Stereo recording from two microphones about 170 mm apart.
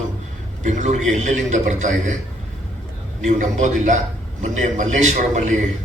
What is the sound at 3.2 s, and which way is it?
A man's voice, 45° right (ahead or behind).